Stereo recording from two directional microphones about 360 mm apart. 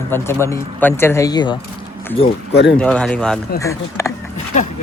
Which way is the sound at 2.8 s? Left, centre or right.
Centre.